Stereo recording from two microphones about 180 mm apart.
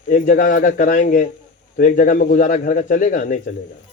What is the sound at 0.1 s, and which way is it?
Speech, 50° left (ahead or behind).